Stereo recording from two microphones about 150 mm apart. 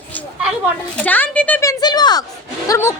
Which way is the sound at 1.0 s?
10° left (ahead or behind).